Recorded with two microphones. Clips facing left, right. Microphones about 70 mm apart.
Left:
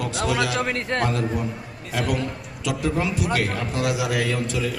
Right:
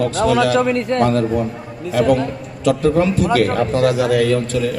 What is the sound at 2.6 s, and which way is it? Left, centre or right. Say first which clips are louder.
A man's voice: right 9 dB; right.